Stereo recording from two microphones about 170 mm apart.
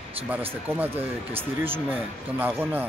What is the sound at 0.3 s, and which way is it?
Speech, 10° right (ahead or behind).